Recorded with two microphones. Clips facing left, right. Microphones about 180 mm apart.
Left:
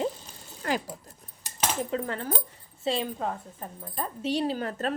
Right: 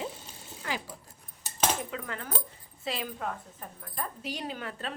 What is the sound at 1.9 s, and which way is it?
A woman's voice, 35° left (ahead or behind).